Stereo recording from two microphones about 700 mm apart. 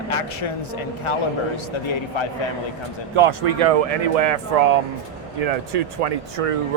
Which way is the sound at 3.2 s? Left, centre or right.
Right.